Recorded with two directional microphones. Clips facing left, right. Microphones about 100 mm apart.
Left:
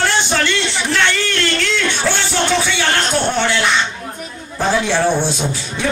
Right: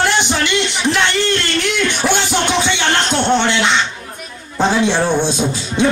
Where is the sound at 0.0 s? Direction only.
15° right (ahead or behind).